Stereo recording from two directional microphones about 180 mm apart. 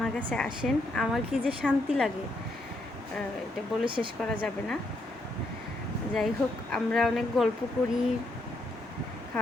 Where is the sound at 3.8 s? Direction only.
30° right (ahead or behind).